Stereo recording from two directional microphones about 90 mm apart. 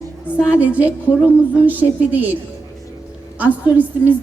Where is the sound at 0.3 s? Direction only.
15° right (ahead or behind).